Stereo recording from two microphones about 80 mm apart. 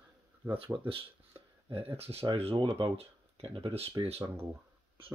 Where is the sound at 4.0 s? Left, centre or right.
Right.